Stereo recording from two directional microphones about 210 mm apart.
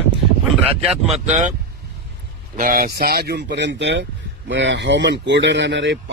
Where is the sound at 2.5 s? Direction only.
40° right (ahead or behind); by 6.0 s 60° right (ahead or behind).